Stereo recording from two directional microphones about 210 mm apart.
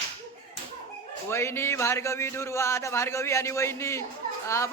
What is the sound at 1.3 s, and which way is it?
Speech, 10° left (ahead or behind).